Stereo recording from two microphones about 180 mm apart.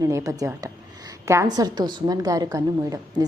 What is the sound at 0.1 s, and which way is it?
A woman's voice, 15° right (ahead or behind).